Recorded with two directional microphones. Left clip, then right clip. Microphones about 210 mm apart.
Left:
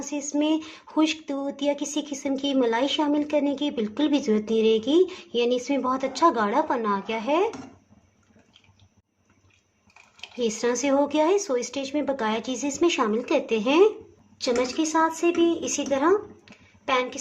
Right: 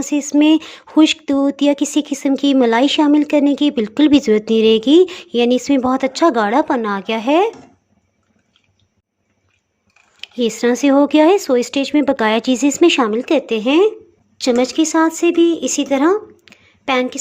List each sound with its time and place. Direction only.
0.0 s speech: 35° right (ahead or behind)
10.2 s speech: 35° right (ahead or behind)
14.3 s speech: 45° right (ahead or behind)